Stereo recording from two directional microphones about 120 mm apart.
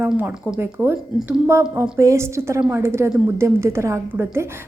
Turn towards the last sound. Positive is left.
turn(degrees=-20)  # may be behind; listen again after turning